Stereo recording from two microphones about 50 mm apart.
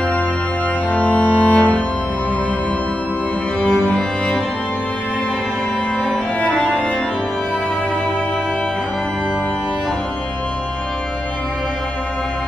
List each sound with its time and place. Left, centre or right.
0.9 s organ: left
3.6 s music: left
6.5 s music: centre